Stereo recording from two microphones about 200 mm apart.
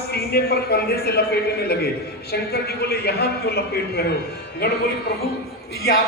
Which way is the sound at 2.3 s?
50° left (ahead or behind).